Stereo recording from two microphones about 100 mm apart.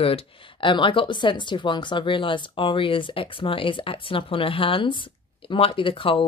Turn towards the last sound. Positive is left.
turn(degrees=60)  # may be behind; listen again after turning